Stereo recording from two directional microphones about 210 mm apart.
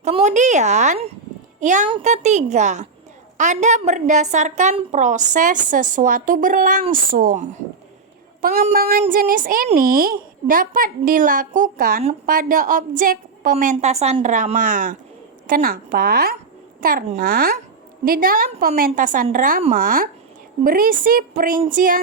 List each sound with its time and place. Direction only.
0.0 s a woman's voice: 30° right (ahead or behind)